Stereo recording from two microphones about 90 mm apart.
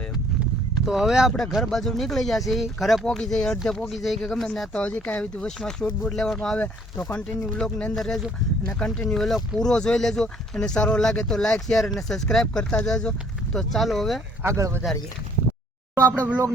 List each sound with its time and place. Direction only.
0.9 s speech: 5° right (ahead or behind)
4.8 s speech: 15° left (ahead or behind)
14.4 s speech: 30° right (ahead or behind)